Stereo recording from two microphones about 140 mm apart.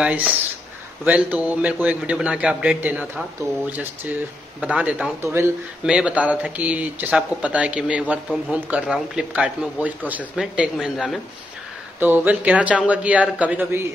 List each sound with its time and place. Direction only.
0.0 s a man's voice: 10° right (ahead or behind)
5.9 s a man's voice: 5° right (ahead or behind)
12.0 s a man's voice: 10° right (ahead or behind)